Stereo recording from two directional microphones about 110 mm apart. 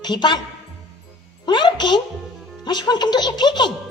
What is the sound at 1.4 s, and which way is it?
A woman's voice, 45° left (ahead or behind).